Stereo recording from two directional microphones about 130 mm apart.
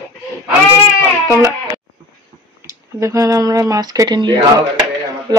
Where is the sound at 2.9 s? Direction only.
25° right (ahead or behind).